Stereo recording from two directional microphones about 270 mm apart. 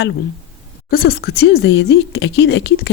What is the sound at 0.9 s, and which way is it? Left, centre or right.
Speech, left.